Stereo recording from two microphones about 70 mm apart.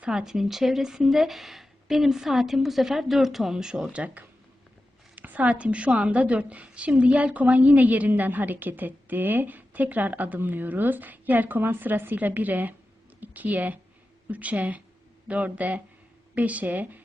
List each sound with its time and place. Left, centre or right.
0.0 s a woman's voice: centre